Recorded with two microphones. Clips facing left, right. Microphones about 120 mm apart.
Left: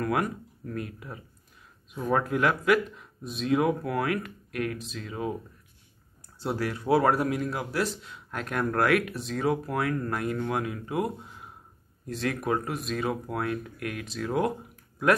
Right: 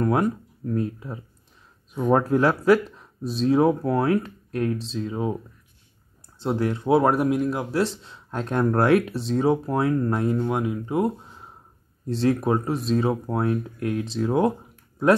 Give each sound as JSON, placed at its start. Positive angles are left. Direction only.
{"t": 0.0, "sound": "speech", "side_deg": -25}
{"t": 6.4, "sound": "a man's voice", "side_deg": -25}